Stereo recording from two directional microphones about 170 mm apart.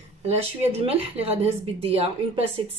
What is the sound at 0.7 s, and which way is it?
Speech, 35° right (ahead or behind).